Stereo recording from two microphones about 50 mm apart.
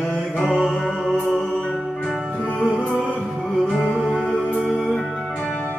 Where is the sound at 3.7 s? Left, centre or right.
Centre.